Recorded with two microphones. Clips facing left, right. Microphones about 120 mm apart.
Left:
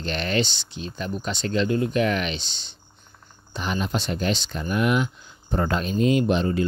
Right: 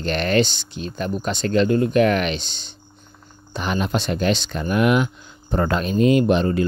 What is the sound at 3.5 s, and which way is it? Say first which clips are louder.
Speech: right 4 dB; 65° right (ahead or behind).